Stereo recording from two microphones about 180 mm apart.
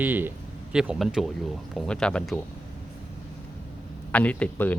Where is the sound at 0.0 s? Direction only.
10° right (ahead or behind).